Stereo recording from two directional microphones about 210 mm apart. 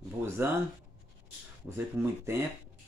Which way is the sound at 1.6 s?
15° right (ahead or behind).